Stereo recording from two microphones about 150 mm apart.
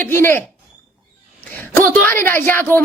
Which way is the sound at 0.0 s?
15° left (ahead or behind).